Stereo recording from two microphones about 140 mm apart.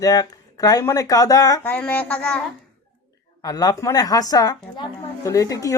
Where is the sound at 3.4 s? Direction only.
25° left (ahead or behind).